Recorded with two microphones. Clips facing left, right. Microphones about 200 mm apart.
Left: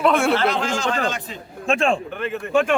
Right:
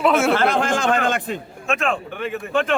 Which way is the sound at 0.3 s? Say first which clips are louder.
Right 2 dB; 50° right (ahead or behind).